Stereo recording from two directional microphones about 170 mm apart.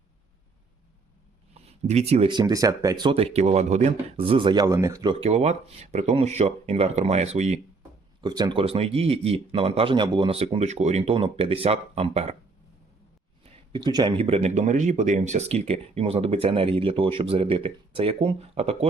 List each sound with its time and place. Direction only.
1.5 s speech: 40° right (ahead or behind); by 5.1 s 20° right (ahead or behind)
5.2 s speech: 40° right (ahead or behind)
8.2 s speech: 25° right (ahead or behind)
13.4 s speech: 25° right (ahead or behind)